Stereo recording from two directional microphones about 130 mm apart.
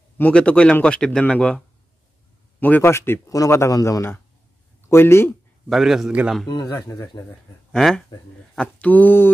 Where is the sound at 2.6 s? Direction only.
15° left (ahead or behind).